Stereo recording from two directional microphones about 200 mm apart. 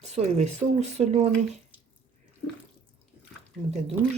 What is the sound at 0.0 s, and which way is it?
Speech, 35° right (ahead or behind).